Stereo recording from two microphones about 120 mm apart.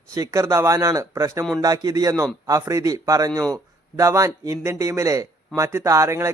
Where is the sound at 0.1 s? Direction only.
25° right (ahead or behind).